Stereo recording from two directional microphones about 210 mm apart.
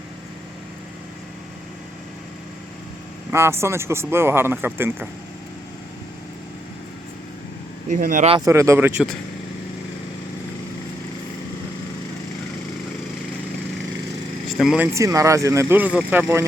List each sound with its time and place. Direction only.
3.3 s speech: 10° right (ahead or behind)
7.9 s speech: 40° right (ahead or behind)
8.4 s speech: 15° right (ahead or behind)
14.6 s speech: centre (ahead or behind)
14.9 s speech: 15° right (ahead or behind)